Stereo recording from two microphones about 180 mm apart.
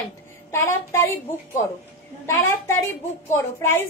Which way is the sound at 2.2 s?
15° left (ahead or behind).